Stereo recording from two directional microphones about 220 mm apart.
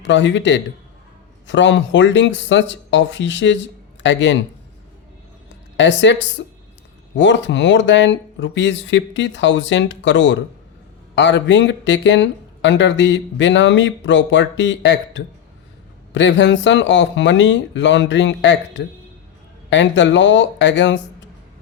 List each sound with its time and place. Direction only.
0.0 s speech: 55° left (ahead or behind)
5.7 s a woman's voice: 55° left (ahead or behind)